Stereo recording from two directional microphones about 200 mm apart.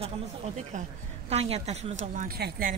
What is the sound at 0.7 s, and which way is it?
A woman's voice, 40° right (ahead or behind).